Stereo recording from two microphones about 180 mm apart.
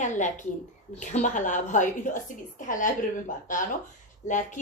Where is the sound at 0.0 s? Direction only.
45° left (ahead or behind).